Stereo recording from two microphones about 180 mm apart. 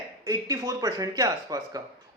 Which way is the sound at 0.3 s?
20° right (ahead or behind).